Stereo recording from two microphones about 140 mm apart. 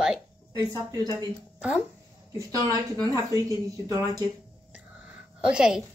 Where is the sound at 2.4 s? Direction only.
25° right (ahead or behind).